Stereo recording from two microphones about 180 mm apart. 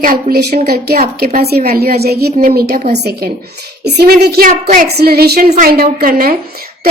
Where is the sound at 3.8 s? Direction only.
65° right (ahead or behind).